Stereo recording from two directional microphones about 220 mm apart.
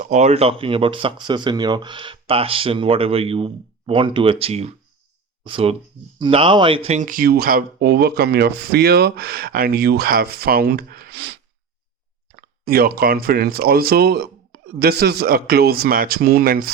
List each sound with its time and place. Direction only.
0.0 s speech: 30° right (ahead or behind); by 11.3 s 50° right (ahead or behind)
12.4 s speech: 45° right (ahead or behind)